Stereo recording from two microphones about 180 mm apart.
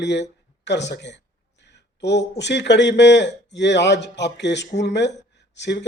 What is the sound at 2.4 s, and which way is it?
Speech, 75° left (ahead or behind).